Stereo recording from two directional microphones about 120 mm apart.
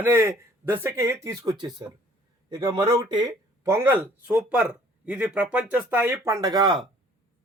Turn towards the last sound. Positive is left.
turn(degrees=-35)  # may be behind; listen again after turning